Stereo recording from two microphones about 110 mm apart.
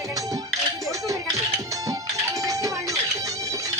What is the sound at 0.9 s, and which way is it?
Music, 30° right (ahead or behind).